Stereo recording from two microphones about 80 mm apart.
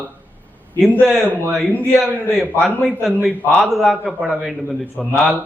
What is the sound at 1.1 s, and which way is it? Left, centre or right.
Speech, right.